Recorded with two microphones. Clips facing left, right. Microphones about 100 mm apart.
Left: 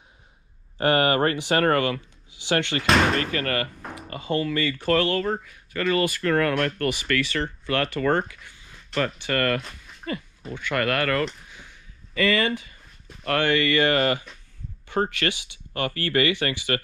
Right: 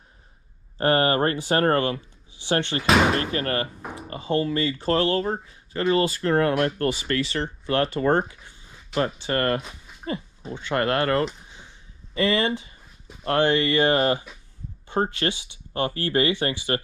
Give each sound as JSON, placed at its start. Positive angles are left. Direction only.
{"t": 0.8, "sound": "speech", "side_deg": -30}
{"t": 2.8, "sound": "speech", "side_deg": -5}
{"t": 3.2, "sound": "speech", "side_deg": -25}
{"t": 3.6, "sound": "speech", "side_deg": -10}
{"t": 4.1, "sound": "speech", "side_deg": -20}
{"t": 6.5, "sound": "speech", "side_deg": -10}
{"t": 6.8, "sound": "speech", "side_deg": -25}
{"t": 9.6, "sound": "a sound", "side_deg": -5}
{"t": 10.5, "sound": "speech", "side_deg": -25}
{"t": 11.5, "sound": "a sound", "side_deg": -25}
{"t": 13.2, "sound": "speech", "side_deg": -25}